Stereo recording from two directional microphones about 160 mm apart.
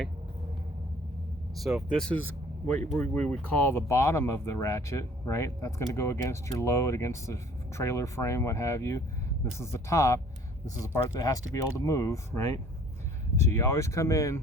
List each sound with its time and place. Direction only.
1.5 s speech: centre (ahead or behind); by 14.4 s 20° left (ahead or behind)